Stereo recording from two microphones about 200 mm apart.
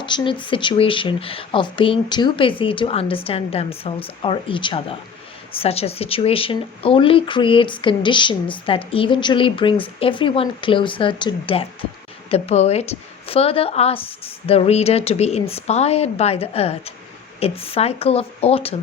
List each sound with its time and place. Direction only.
0.0 s a woman's voice: 25° left (ahead or behind)